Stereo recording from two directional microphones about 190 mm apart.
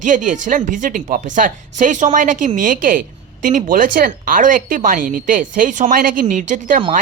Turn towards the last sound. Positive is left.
turn(degrees=-40)  # may be behind; listen again after turning